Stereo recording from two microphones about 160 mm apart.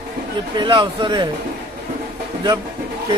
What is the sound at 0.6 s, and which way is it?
Speech, 30° right (ahead or behind).